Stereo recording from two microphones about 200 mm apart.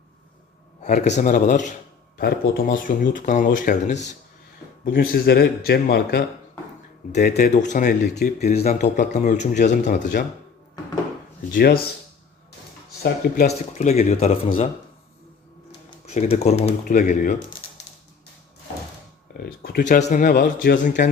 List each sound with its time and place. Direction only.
0.8 s speech: 35° left (ahead or behind)
4.9 s speech: 50° left (ahead or behind)
7.5 s speech: 40° left (ahead or behind)
7.9 s speech: 55° left (ahead or behind)
8.5 s speech: 35° left (ahead or behind)
11.5 s speech: 50° left (ahead or behind)
13.0 s speech: 50° left (ahead or behind)
13.5 s speech: 35° left (ahead or behind)
16.0 s speech: 35° left (ahead or behind)
19.4 s speech: 50° left (ahead or behind)
19.8 s speech: 35° left (ahead or behind)